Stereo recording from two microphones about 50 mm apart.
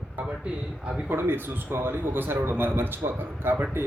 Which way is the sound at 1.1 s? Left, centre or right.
Right.